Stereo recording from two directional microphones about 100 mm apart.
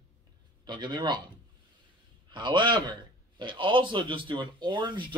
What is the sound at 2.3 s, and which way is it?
A man's voice, 50° right (ahead or behind).